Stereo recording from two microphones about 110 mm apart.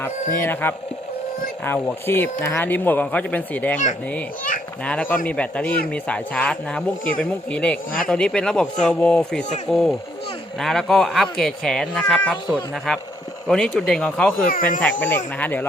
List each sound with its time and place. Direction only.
0.0 s a man's voice: 20° left (ahead or behind)
4.8 s a man's voice: 10° left (ahead or behind)